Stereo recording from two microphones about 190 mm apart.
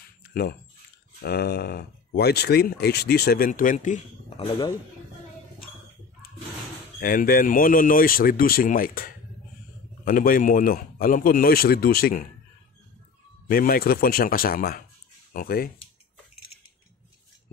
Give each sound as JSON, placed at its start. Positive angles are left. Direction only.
{"t": 0.2, "sound": "a sound", "side_deg": 55}
{"t": 1.2, "sound": "speech", "side_deg": 55}
{"t": 7.0, "sound": "speech", "side_deg": 50}
{"t": 13.5, "sound": "speech", "side_deg": 50}